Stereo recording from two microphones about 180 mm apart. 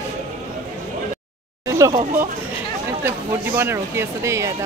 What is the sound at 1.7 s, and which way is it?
Speech, 20° right (ahead or behind).